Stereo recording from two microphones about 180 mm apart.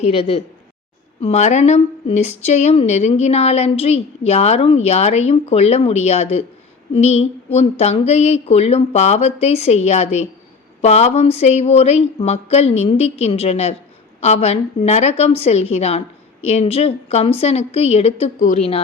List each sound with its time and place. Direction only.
0.0 s a woman's voice: 35° left (ahead or behind)